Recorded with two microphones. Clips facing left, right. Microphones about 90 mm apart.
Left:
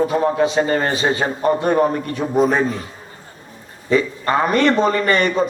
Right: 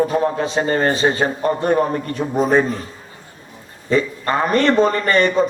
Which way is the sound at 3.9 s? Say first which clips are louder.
Left 1 dB; 35° right (ahead or behind).